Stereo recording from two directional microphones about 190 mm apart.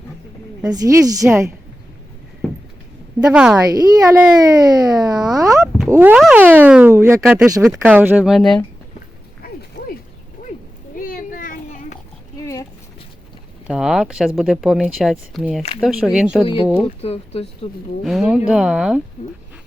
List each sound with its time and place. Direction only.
0.7 s speech: 20° right (ahead or behind)
3.3 s speech: 5° right (ahead or behind)
3.7 s speech: 20° right (ahead or behind); by 8.6 s centre (ahead or behind)
9.8 s ratchet: 40° left (ahead or behind)
10.9 s children playing: 45° left (ahead or behind)
13.7 s speech: 5° right (ahead or behind)
16.7 s speech: 30° left (ahead or behind)
18.0 s speech: centre (ahead or behind)